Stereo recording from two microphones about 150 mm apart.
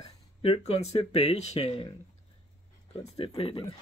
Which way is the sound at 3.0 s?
40° left (ahead or behind).